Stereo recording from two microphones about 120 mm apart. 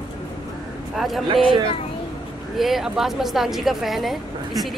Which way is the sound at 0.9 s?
Centre (ahead or behind).